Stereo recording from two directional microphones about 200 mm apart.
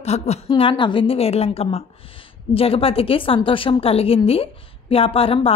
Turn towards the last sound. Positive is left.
turn(degrees=30)  # may be behind; listen again after turning